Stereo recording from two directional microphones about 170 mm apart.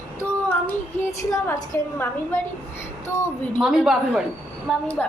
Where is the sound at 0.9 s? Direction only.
15° left (ahead or behind).